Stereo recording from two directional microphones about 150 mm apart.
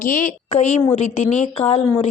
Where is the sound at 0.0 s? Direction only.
60° left (ahead or behind).